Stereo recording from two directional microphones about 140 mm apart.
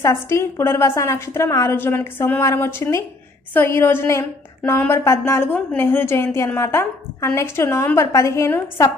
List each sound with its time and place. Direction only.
0.0 s a woman's voice: 20° left (ahead or behind)